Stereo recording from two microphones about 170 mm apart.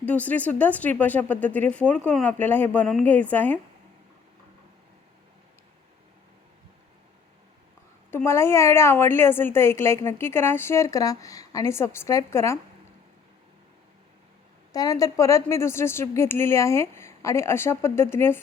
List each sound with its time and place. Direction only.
0.0 s a woman's voice: 10° left (ahead or behind)
8.1 s a woman's voice: 15° left (ahead or behind)
14.7 s a woman's voice: 20° left (ahead or behind)